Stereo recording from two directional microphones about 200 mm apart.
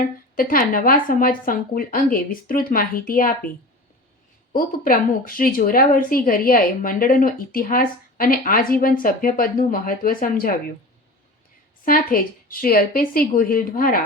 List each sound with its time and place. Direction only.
0.3 s a woman's voice: 45° left (ahead or behind)
4.5 s a woman's voice: 45° left (ahead or behind)
11.9 s a woman's voice: 45° left (ahead or behind)